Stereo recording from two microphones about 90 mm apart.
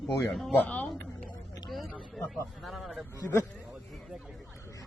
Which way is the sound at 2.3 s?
Centre (ahead or behind).